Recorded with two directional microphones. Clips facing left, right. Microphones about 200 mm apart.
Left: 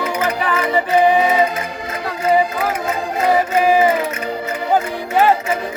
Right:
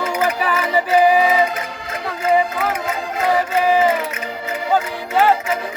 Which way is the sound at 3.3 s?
15° left (ahead or behind).